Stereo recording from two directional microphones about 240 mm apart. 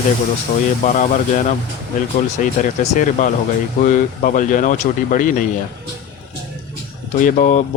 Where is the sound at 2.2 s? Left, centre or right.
Left.